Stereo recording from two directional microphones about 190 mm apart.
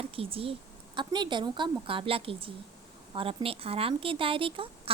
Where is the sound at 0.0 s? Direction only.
30° right (ahead or behind).